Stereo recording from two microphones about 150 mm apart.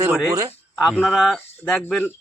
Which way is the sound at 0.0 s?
20° right (ahead or behind).